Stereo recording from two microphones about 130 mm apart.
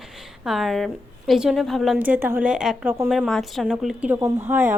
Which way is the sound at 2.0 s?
15° right (ahead or behind).